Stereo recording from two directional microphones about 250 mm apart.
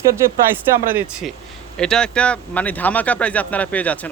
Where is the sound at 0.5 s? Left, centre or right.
Centre.